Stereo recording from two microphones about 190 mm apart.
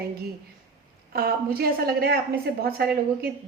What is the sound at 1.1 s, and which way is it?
A woman's voice, 55° right (ahead or behind).